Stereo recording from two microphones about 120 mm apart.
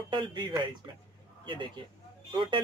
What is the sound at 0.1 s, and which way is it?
Speech, 40° right (ahead or behind).